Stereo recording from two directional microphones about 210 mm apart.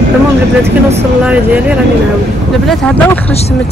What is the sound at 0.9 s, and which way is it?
Speech, 5° right (ahead or behind).